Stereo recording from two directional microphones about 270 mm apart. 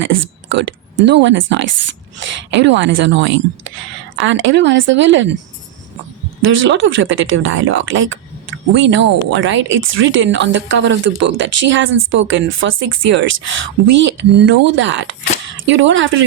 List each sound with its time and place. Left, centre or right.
0.4 s a woman's voice: right
6.4 s speech: right